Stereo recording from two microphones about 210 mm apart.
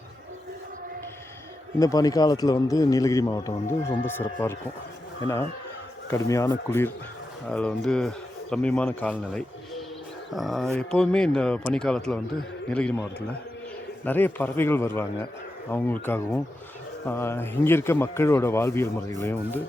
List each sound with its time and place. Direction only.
1.8 s a man's voice: 15° left (ahead or behind)
6.1 s a man's voice: 15° left (ahead or behind)
14.0 s a man's voice: 10° left (ahead or behind)